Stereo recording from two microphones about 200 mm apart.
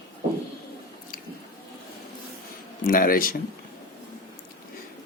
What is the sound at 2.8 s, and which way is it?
Speech, 45° left (ahead or behind).